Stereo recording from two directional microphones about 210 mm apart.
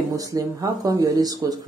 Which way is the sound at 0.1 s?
15° right (ahead or behind).